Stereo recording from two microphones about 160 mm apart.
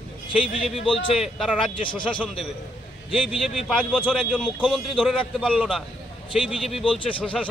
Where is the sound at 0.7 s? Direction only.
35° left (ahead or behind).